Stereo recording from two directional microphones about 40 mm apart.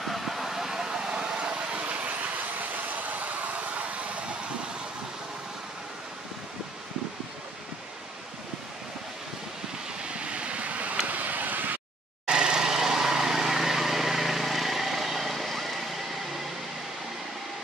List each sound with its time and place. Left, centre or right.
0.0 s vehicle: centre; by 1.8 s right
1.9 s vehicle: right
10.0 s vehicle: right
12.3 s vehicle: right; by 15.8 s centre